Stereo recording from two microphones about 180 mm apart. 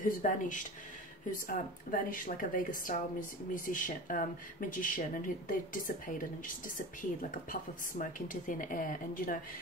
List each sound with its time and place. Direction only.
0.0 s speech: 45° left (ahead or behind)
8.0 s speech: 50° left (ahead or behind)